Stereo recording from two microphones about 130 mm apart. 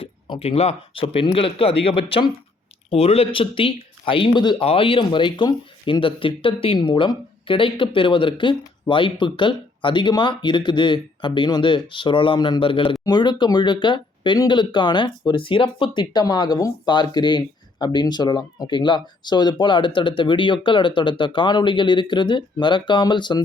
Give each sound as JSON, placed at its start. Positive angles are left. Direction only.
{"t": 0.0, "sound": "speech", "side_deg": 45}